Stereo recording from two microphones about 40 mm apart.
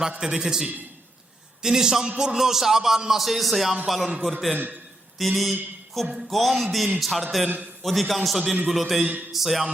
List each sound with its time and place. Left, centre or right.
0.2 s a man's voice: centre
4.5 s a man's voice: right
5.1 s a man's voice: centre